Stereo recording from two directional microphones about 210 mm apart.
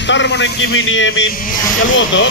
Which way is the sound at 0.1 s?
60° left (ahead or behind).